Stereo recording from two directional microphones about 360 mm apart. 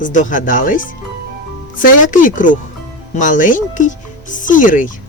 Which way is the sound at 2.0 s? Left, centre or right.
Left.